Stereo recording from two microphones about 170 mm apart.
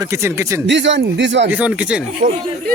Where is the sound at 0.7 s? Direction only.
90° right.